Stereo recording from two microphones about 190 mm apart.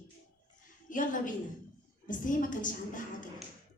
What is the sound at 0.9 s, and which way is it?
A woman's voice, 45° left (ahead or behind).